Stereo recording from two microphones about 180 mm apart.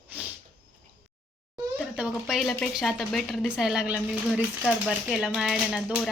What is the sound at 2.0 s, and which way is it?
A woman's voice, 5° right (ahead or behind).